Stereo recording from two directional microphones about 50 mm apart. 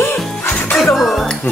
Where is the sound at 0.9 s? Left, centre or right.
Centre.